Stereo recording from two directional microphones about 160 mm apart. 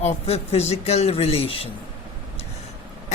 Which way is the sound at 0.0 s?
40° left (ahead or behind).